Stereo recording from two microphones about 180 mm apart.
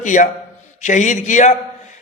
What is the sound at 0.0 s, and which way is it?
A man's voice, 45° left (ahead or behind).